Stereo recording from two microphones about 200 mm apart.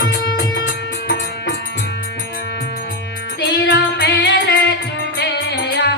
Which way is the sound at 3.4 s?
60° left (ahead or behind).